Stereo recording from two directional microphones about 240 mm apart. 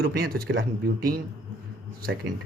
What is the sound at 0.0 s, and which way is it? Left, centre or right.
Speech, right.